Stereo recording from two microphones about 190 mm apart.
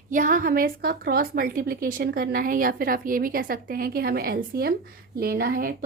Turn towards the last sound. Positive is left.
turn(degrees=-50)  # may be behind; listen again after turning